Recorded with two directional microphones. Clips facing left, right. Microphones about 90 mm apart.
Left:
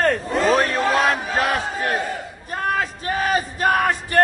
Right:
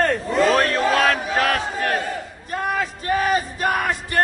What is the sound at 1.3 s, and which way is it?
Battle cry, 20° left (ahead or behind).